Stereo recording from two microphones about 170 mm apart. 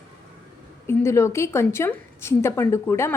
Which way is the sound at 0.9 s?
15° left (ahead or behind).